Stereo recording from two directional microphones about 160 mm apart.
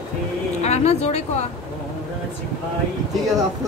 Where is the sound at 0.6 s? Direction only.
45° left (ahead or behind).